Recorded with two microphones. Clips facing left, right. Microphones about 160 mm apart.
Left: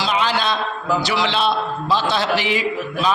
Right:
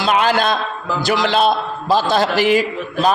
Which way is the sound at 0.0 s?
55° right (ahead or behind).